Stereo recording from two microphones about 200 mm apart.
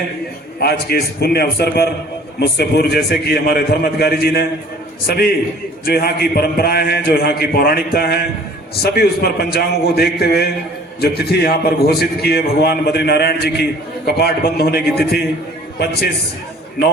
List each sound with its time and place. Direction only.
0.6 s a man's voice: 50° left (ahead or behind)